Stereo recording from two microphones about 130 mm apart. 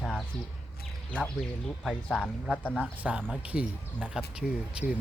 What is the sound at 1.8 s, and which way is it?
Speech, 10° left (ahead or behind).